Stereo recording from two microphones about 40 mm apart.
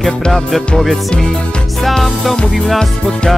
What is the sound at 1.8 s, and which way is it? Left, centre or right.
Music, centre.